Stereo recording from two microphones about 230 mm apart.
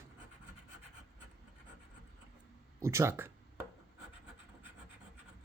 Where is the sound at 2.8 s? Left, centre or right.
Centre.